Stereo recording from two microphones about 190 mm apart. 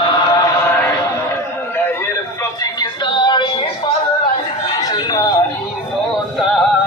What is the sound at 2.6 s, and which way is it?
Music, 20° left (ahead or behind).